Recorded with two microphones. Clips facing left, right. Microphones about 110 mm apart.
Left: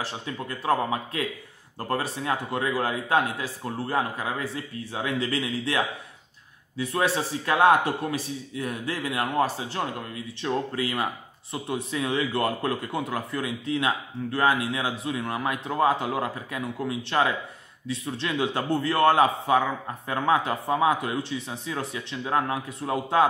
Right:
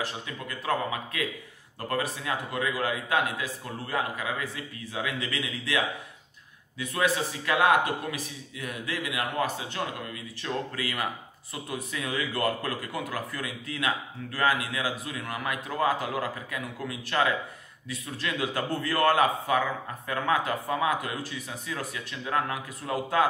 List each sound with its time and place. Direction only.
0.0 s a man's voice: 30° left (ahead or behind)